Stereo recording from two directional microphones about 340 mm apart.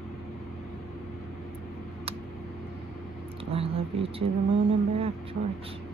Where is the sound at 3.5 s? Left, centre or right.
Centre.